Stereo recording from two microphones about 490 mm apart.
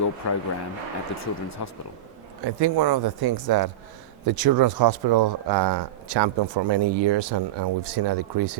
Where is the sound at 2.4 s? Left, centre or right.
Right.